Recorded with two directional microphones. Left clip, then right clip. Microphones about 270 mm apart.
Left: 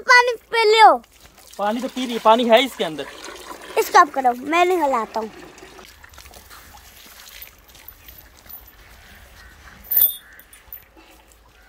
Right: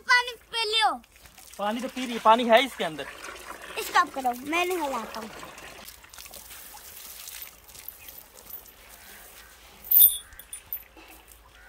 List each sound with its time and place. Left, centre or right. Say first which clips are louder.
0.0 s a sound: left 9 dB; centre
1.6 s speech: left 7 dB; left
3.7 s speech: left 10 dB; centre